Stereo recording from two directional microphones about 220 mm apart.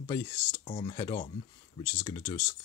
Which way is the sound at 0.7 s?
25° left (ahead or behind).